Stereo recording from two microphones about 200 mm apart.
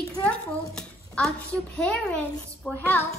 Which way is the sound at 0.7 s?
5° left (ahead or behind).